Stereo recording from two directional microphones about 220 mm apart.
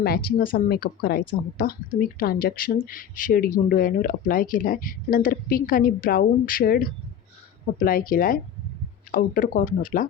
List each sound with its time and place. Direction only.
0.0 s speech: 45° left (ahead or behind)